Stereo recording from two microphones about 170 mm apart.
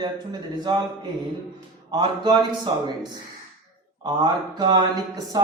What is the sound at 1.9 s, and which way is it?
Speech, 25° right (ahead or behind).